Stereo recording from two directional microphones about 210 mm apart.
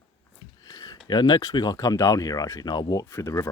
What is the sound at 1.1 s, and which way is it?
Speech, 20° left (ahead or behind).